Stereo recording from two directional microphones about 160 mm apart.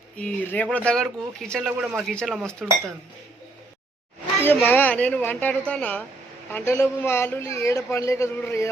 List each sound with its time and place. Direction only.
0.2 s a man's voice: 10° left (ahead or behind)
1.8 s a man's voice: 5° right (ahead or behind)
4.4 s a man's voice: 10° left (ahead or behind)